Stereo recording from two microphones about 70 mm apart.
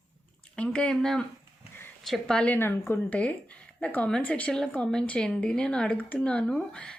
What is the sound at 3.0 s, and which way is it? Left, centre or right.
A woman's voice, centre.